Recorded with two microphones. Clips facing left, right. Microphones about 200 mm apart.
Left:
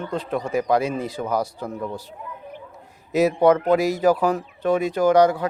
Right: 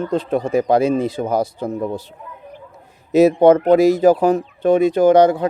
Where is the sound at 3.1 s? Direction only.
25° right (ahead or behind).